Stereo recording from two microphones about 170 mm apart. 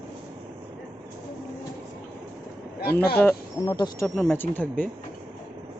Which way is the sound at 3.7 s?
25° left (ahead or behind).